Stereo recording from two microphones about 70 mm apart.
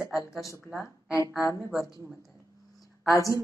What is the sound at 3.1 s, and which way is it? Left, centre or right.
Speech, left.